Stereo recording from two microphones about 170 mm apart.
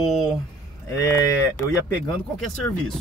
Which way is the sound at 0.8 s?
20° left (ahead or behind).